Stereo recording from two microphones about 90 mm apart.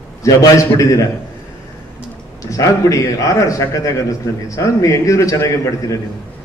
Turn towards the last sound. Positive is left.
turn(degrees=35)  # may be behind; listen again after turning